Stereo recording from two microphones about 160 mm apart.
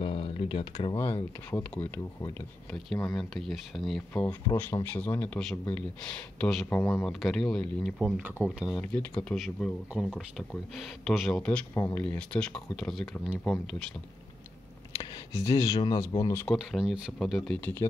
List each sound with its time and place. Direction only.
0.0 s a sound: 35° left (ahead or behind)
1.5 s speech: 15° left (ahead or behind)
4.1 s speech: 10° left (ahead or behind)
8.0 s speech: 10° right (ahead or behind)
8.5 s speech: centre (ahead or behind)
15.0 s speech: 20° left (ahead or behind)
16.4 s speech: centre (ahead or behind)